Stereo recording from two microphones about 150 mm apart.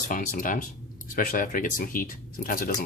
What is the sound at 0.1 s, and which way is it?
Speech, 60° left (ahead or behind).